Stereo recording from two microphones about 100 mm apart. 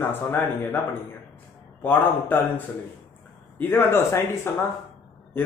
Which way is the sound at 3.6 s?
20° left (ahead or behind).